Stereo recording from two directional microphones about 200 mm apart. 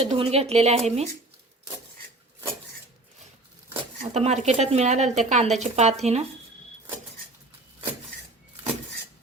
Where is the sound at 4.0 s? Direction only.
35° right (ahead or behind).